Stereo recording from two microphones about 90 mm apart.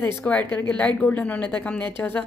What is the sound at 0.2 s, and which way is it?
A woman's voice, 15° left (ahead or behind).